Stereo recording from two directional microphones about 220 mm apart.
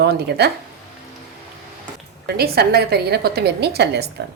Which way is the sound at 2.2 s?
45° right (ahead or behind).